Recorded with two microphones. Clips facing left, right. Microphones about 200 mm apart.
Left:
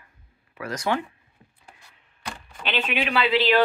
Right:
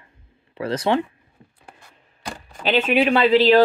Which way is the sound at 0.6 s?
30° right (ahead or behind).